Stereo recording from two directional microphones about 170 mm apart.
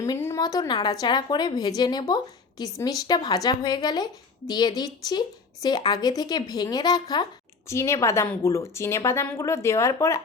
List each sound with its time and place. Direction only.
0.0 s a woman's voice: 15° left (ahead or behind)